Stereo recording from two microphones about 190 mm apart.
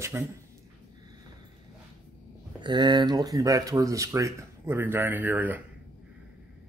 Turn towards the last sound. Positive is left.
turn(degrees=-10)  # may be behind; listen again after turning